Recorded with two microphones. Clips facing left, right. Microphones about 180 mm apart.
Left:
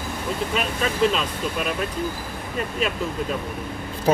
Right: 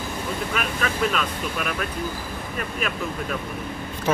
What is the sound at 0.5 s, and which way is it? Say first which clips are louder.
Speech: left 3 dB; 25° left (ahead or behind).